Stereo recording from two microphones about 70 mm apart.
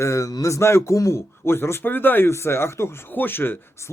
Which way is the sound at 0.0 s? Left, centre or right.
Left.